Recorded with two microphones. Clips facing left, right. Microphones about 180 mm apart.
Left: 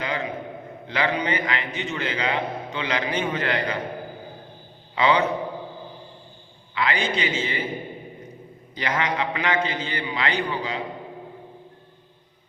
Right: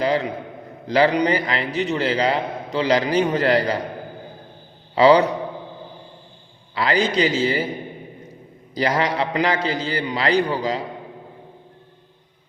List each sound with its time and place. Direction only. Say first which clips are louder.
0.0 s a man's voice: right 7 dB; 35° right (ahead or behind)
4.9 s a man's voice: right 7 dB; 35° right (ahead or behind)
6.7 s a man's voice: right 6 dB; 35° right (ahead or behind)
8.7 s a man's voice: right 5 dB; 35° right (ahead or behind)